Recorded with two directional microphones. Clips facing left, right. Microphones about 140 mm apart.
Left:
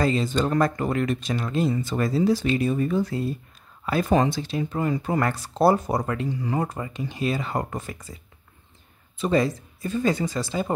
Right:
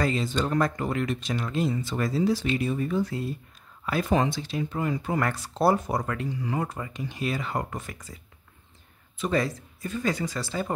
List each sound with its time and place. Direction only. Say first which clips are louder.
0.0 s speech: left 4 dB; 35° left (ahead or behind)
0.3 s speech: left 3 dB; 45° left (ahead or behind)
9.2 s speech: left 4 dB; 25° left (ahead or behind)